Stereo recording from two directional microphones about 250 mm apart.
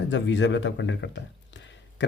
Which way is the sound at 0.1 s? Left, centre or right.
Left.